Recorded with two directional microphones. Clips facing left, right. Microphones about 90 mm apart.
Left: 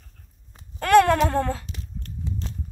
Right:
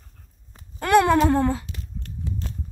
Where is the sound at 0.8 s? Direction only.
15° right (ahead or behind).